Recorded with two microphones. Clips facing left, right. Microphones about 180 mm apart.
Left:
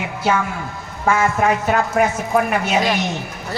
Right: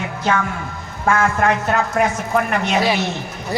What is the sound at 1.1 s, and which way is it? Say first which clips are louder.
A woman's voice: even; 5° left (ahead or behind).